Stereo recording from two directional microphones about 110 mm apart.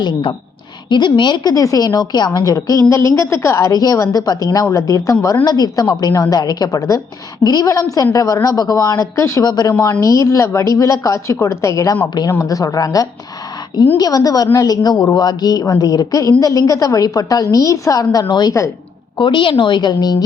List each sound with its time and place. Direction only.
0.0 s a woman's voice: 45° left (ahead or behind)